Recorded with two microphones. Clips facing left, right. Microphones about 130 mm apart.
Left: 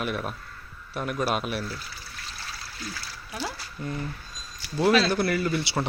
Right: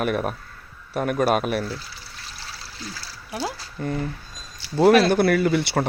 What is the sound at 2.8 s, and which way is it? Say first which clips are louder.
Splash: right 1 dB; 35° right (ahead or behind).